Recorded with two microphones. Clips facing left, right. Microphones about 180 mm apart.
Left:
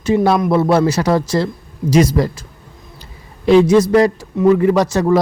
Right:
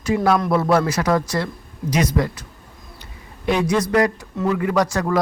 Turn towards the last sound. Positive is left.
turn(degrees=25)  # may be behind; listen again after turning